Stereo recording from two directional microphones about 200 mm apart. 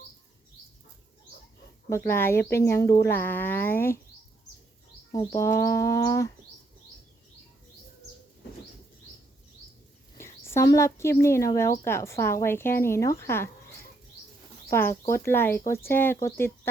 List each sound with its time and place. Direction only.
1.9 s speech: 10° left (ahead or behind)
5.1 s speech: 15° left (ahead or behind)
10.2 s speech: 15° left (ahead or behind)
14.7 s speech: 15° left (ahead or behind)